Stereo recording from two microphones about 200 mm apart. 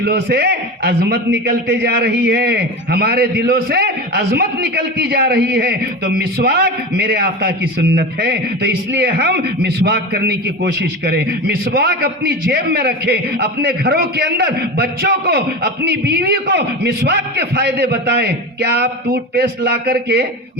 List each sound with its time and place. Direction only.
0.0 s a man's voice: 50° right (ahead or behind)